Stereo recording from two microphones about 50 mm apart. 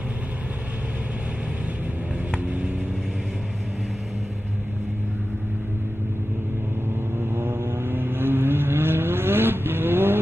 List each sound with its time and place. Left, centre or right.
7.2 s vehicle: right